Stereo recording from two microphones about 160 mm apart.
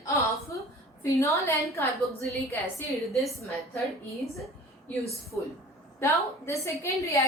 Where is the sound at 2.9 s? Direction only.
Centre (ahead or behind).